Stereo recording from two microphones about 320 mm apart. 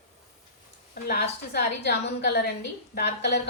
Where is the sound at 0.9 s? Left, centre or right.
Left.